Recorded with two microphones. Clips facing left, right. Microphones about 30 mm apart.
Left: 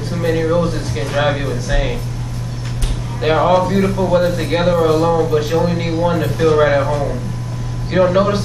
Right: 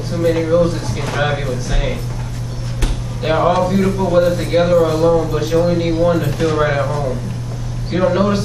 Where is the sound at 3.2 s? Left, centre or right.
Centre.